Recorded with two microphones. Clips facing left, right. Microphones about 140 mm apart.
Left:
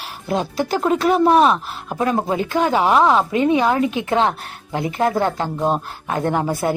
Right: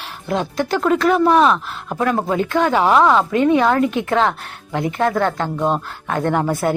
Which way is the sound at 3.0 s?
20° left (ahead or behind).